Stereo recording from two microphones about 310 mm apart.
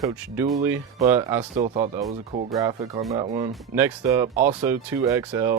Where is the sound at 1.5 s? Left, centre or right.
Right.